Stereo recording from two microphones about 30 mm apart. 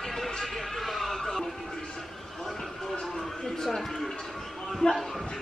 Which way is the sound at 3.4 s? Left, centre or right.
Centre.